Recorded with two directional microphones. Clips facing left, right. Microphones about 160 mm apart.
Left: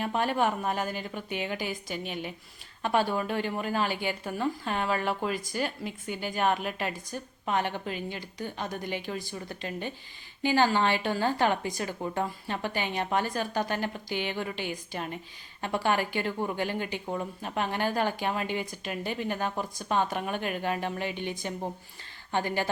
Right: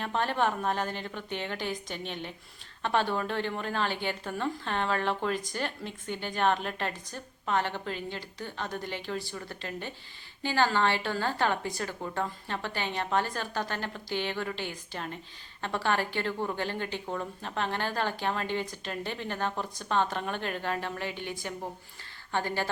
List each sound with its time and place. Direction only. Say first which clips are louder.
0.0 s a woman's voice: left 2 dB; 10° left (ahead or behind)